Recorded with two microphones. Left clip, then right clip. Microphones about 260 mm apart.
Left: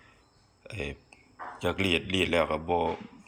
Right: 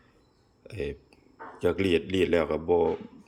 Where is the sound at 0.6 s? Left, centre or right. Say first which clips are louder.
Right 3 dB; centre.